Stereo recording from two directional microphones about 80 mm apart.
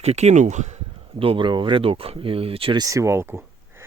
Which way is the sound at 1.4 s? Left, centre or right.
Right.